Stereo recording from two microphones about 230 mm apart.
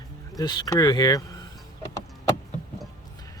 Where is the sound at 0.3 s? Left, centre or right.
Centre.